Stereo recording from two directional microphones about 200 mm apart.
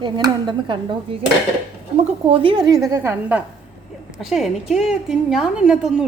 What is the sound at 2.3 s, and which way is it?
A woman's voice, 25° right (ahead or behind).